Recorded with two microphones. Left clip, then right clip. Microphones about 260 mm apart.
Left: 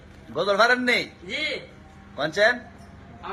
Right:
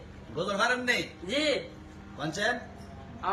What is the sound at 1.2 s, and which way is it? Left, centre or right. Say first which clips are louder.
Speech: even; centre.